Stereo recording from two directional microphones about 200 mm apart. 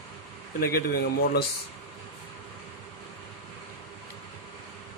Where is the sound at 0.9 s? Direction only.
50° left (ahead or behind).